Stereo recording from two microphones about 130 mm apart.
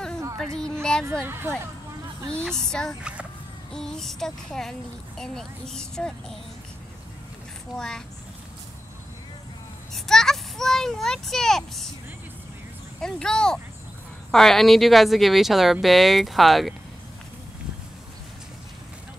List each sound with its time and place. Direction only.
0.4 s a sound: 5° left (ahead or behind)
1.2 s speech: 15° right (ahead or behind)
2.2 s speech: 5° left (ahead or behind)
3.0 s speech: 10° right (ahead or behind)
3.7 s speech: 5° left (ahead or behind)
7.7 s speech: 5° left (ahead or behind)
9.9 s speech: 5° left (ahead or behind)
13.0 s speech: 5° left (ahead or behind)